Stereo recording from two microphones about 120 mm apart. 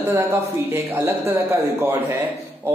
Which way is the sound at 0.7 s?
20° right (ahead or behind).